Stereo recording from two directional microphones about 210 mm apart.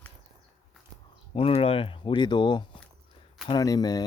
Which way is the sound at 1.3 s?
25° left (ahead or behind).